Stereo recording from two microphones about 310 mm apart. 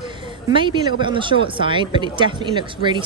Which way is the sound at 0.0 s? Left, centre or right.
Centre.